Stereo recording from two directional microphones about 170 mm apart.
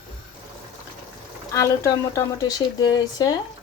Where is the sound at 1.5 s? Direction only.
20° left (ahead or behind).